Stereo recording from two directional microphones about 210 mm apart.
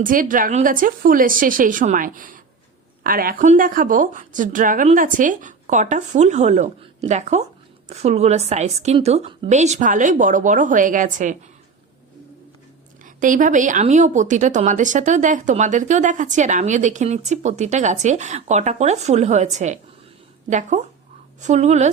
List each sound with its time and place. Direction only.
0.0 s a woman's voice: 40° right (ahead or behind)
13.1 s a woman's voice: 40° right (ahead or behind)